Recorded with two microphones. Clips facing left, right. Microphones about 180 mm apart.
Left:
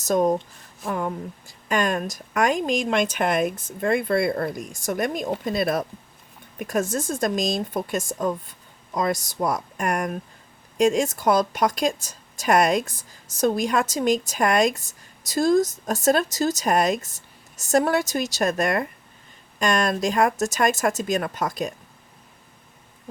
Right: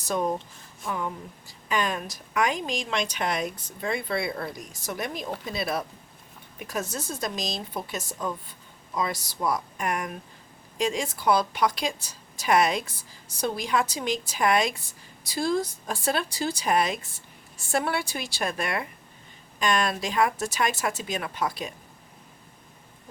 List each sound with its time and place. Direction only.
0.0 s speech: 45° left (ahead or behind)